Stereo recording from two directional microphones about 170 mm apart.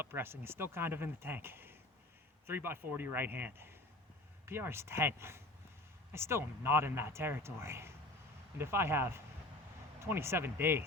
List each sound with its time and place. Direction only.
0.0 s speech: 15° right (ahead or behind)